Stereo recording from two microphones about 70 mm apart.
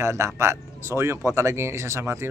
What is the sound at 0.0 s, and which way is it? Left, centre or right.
Speech, right.